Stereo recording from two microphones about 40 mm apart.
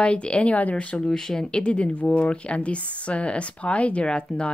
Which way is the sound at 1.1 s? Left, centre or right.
Centre.